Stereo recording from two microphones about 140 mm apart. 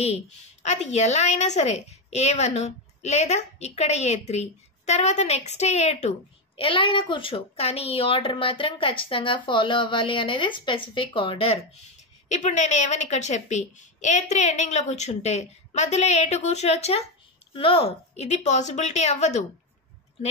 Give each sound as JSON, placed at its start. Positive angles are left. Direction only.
{"t": 0.0, "sound": "a woman's voice", "side_deg": 50}